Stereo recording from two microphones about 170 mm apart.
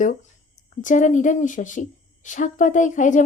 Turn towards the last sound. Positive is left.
turn(degrees=45)  # may be behind; listen again after turning